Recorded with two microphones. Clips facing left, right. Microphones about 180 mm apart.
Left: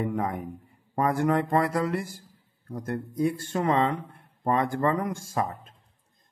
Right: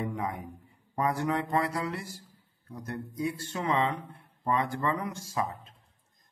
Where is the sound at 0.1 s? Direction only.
50° left (ahead or behind).